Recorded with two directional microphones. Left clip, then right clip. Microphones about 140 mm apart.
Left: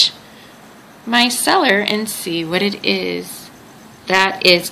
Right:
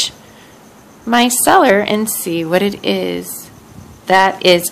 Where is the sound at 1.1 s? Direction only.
45° right (ahead or behind).